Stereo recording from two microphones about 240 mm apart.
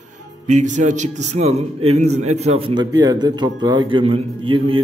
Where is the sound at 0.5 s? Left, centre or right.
Right.